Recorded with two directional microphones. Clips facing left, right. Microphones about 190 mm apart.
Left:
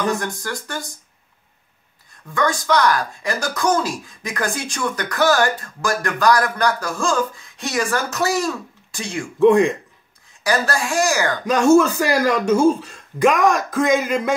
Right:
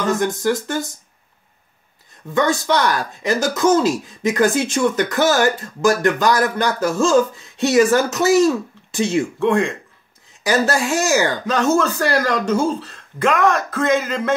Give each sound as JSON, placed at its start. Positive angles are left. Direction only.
{"t": 0.1, "sound": "speech", "side_deg": -20}
{"t": 2.3, "sound": "speech", "side_deg": -25}
{"t": 9.4, "sound": "speech", "side_deg": 15}
{"t": 10.4, "sound": "speech", "side_deg": -20}
{"t": 11.4, "sound": "speech", "side_deg": 10}